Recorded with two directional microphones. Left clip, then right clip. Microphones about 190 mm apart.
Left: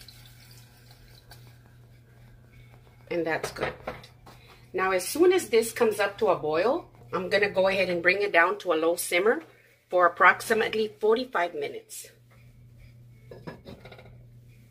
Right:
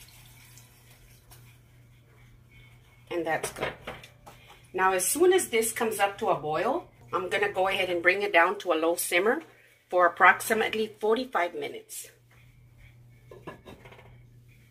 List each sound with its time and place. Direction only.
3.1 s speech: 15° left (ahead or behind)
4.7 s speech: 25° left (ahead or behind)